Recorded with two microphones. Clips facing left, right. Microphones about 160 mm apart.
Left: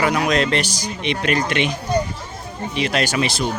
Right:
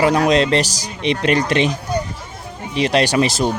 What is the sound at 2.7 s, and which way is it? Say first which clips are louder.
Speech: right 5 dB; 35° right (ahead or behind).